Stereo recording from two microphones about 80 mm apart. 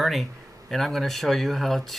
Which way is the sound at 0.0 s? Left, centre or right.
Centre.